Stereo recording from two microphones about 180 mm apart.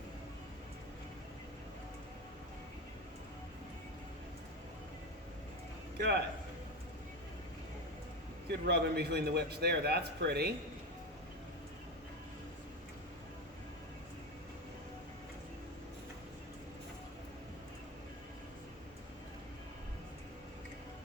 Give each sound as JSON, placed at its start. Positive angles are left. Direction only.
{"t": 6.0, "sound": "a man's voice", "side_deg": -70}
{"t": 8.4, "sound": "a man's voice", "side_deg": -70}